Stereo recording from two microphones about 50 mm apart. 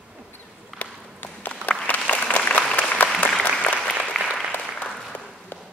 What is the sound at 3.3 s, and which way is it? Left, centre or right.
Applause, centre.